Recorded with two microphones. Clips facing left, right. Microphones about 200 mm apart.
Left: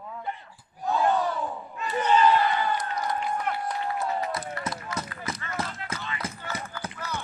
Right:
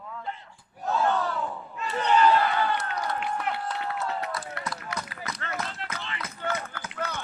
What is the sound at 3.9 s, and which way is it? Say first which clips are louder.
Run: left 2 dB; 20° left (ahead or behind).